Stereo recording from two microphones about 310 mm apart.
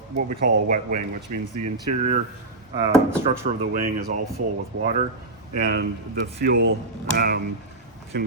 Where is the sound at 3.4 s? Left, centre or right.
Right.